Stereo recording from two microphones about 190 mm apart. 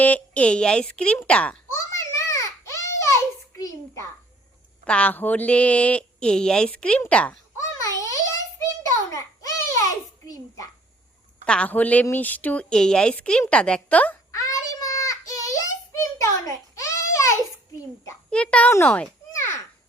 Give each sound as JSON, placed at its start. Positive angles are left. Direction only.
{"t": 0.0, "sound": "a child's voice", "side_deg": 10}
{"t": 2.1, "sound": "baby cry", "side_deg": 15}
{"t": 3.6, "sound": "a sound", "side_deg": 15}
{"t": 4.9, "sound": "speech", "side_deg": 5}
{"t": 9.0, "sound": "babbling", "side_deg": 15}
{"t": 11.4, "sound": "a sound", "side_deg": 5}
{"t": 18.0, "sound": "a child's voice", "side_deg": 10}